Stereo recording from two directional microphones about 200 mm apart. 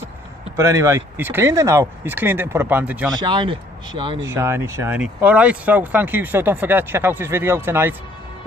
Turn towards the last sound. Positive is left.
turn(degrees=-10)  # may be behind; listen again after turning